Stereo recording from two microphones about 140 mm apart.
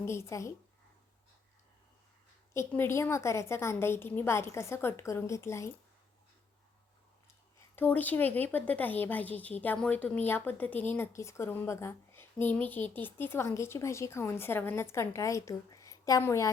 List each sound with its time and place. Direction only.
0.0 s a woman's voice: 20° left (ahead or behind)
2.5 s a woman's voice: 20° left (ahead or behind)
7.8 s speech: 10° left (ahead or behind)